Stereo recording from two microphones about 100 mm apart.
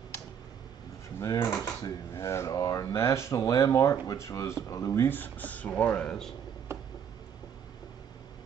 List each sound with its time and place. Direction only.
1.2 s speech: 30° left (ahead or behind)
5.0 s speech: 20° left (ahead or behind)